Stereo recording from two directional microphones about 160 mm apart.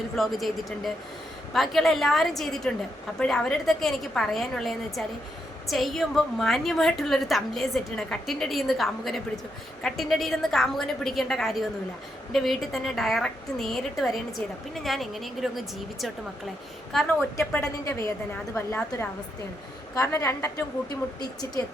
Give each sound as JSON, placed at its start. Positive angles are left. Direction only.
{"t": 0.2, "sound": "a woman's voice", "side_deg": 0}
{"t": 17.3, "sound": "a woman's voice", "side_deg": 15}